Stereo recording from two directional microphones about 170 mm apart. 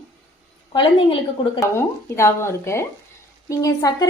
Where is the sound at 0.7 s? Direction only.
30° left (ahead or behind).